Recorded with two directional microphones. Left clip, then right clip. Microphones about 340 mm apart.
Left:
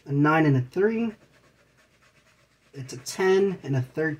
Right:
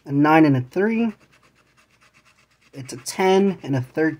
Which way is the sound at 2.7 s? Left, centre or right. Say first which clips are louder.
Right 5 dB; right.